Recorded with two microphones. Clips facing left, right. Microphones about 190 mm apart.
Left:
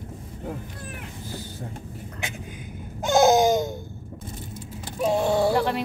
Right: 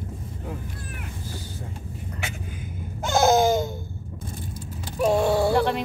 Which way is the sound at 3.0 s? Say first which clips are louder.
Left 2 dB; 15° left (ahead or behind).